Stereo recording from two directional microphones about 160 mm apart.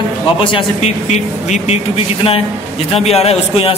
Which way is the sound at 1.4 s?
45° left (ahead or behind).